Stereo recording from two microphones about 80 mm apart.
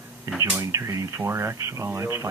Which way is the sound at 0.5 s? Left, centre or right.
Right.